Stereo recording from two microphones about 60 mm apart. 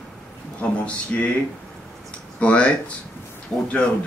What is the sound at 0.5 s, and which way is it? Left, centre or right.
Speech, left.